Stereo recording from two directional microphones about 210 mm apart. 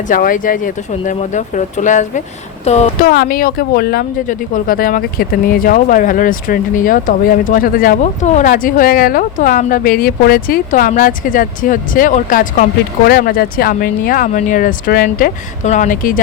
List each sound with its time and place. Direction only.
0.1 s speech: 40° left (ahead or behind)
3.0 s speech: 45° left (ahead or behind)